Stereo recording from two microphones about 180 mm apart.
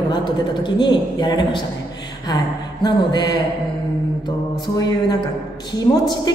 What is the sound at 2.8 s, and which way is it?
Speech, 25° left (ahead or behind).